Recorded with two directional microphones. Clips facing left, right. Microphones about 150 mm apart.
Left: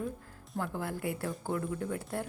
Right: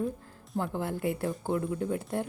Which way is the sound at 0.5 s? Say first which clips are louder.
Right 4 dB; 25° right (ahead or behind).